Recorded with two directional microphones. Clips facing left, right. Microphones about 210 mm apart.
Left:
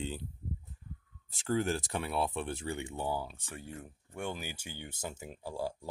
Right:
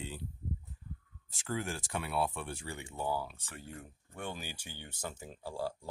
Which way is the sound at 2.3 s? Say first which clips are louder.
Left 6 dB; 20° left (ahead or behind).